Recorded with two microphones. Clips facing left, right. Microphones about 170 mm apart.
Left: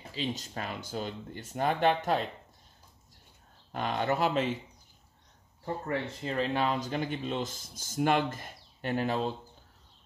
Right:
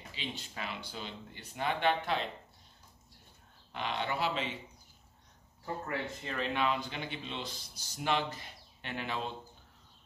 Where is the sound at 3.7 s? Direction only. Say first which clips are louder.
Left 6 dB; 45° left (ahead or behind).